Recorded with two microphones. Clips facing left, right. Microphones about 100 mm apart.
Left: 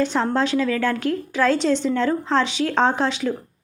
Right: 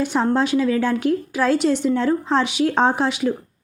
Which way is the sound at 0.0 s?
15° right (ahead or behind).